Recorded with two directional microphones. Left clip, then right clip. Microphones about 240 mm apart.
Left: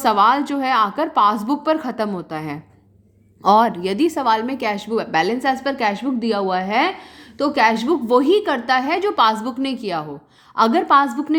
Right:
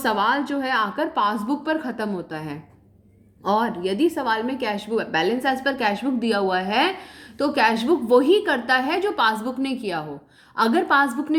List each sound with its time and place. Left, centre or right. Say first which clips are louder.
0.0 s a woman's voice: left 6 dB; left